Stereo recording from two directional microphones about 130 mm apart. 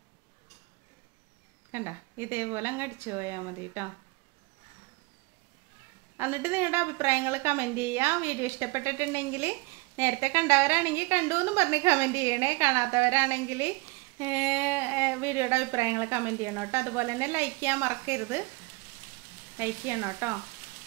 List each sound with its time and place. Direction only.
1.7 s a woman's voice: 20° right (ahead or behind)
6.1 s a woman's voice: 15° right (ahead or behind)
19.5 s a woman's voice: 20° right (ahead or behind)